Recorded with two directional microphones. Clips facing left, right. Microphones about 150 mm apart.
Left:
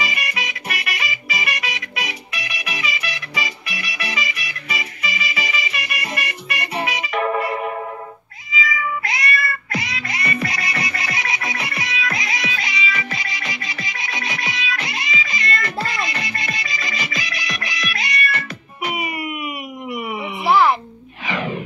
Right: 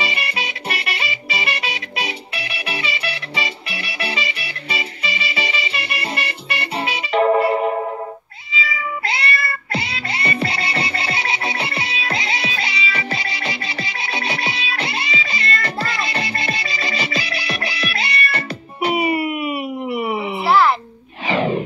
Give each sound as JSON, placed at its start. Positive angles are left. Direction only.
{"t": 0.0, "sound": "music", "side_deg": -30}
{"t": 20.4, "sound": "music", "side_deg": 15}
{"t": 21.3, "sound": "a sound", "side_deg": -30}